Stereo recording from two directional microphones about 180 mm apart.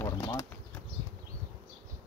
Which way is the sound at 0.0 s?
15° left (ahead or behind).